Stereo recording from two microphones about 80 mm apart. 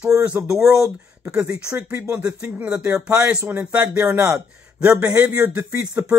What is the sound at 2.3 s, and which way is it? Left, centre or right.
Speech, right.